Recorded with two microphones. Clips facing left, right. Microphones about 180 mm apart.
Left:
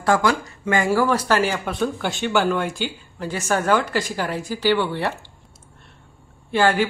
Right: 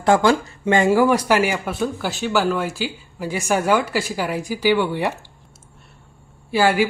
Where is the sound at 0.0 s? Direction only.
25° right (ahead or behind).